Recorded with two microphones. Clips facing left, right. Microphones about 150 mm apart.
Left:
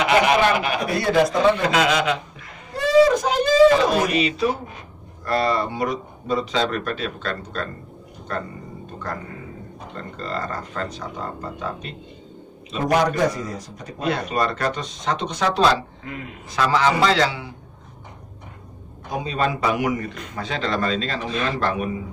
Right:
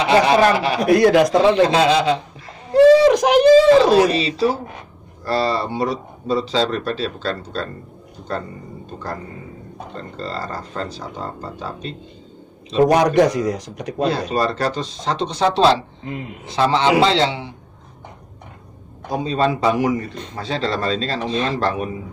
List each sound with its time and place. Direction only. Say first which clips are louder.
0.0 s a man's voice: right 3 dB; 30° right (ahead or behind)
0.8 s speech: right 9 dB; 85° right
1.7 s a man's voice: right 4 dB; 30° right (ahead or behind)
2.7 s a sound: right 6 dB; 85° right
3.6 s a man's voice: right 4 dB; 30° right (ahead or behind)
9.9 s a man's voice: right 1 dB; 30° right (ahead or behind)
13.1 s speech: right 7 dB; 80° right
13.9 s a man's voice: right 3 dB; 30° right (ahead or behind)
19.0 s a man's voice: right 4 dB; 30° right (ahead or behind)